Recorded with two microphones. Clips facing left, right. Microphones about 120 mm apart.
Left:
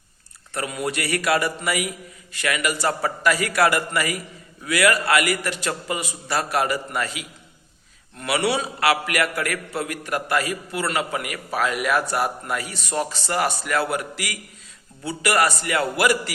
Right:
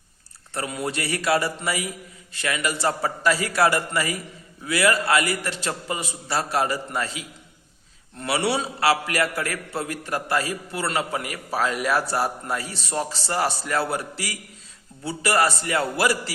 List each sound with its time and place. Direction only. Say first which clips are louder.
0.5 s a man's voice: left 1 dB; 30° right (ahead or behind)